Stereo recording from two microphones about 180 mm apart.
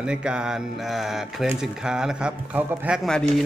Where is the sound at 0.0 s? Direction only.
5° right (ahead or behind).